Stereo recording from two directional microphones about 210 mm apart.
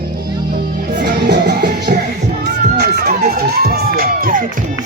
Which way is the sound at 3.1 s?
45° right (ahead or behind).